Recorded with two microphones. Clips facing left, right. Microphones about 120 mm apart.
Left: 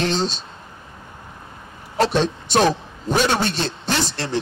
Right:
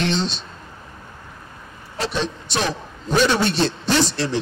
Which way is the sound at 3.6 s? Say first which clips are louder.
Right 4 dB; 45° left (ahead or behind).